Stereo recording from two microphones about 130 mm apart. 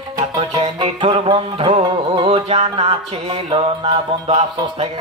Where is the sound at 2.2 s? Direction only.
50° right (ahead or behind).